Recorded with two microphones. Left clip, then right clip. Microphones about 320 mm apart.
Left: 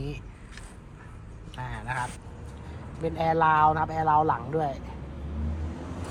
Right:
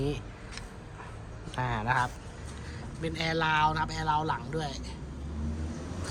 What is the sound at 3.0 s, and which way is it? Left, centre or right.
Speech, centre.